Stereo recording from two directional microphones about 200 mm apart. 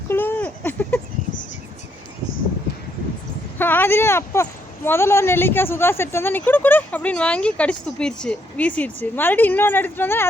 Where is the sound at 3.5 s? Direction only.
10° left (ahead or behind).